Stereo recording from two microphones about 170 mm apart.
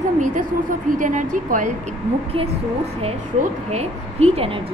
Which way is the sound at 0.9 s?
50° right (ahead or behind).